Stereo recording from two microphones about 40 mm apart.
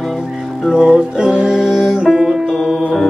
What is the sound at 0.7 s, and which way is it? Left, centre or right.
Music, centre.